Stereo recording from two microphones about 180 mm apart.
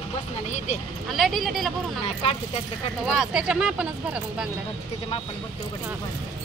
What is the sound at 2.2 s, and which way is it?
Speech, 35° left (ahead or behind).